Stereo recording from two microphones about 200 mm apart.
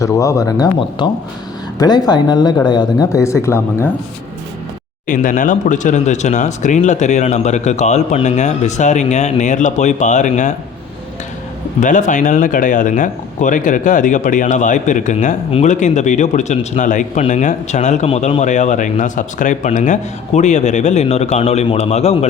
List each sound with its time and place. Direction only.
0.0 s speech: 15° left (ahead or behind)
5.0 s speech: 40° left (ahead or behind)
11.8 s speech: 40° left (ahead or behind)